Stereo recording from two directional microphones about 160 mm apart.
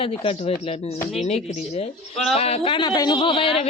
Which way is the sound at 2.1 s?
Centre (ahead or behind).